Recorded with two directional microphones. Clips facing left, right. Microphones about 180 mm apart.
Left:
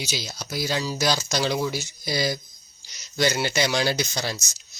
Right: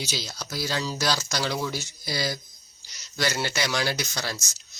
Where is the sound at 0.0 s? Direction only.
15° left (ahead or behind).